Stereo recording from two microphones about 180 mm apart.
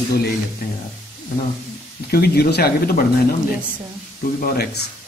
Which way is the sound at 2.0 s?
60° left (ahead or behind).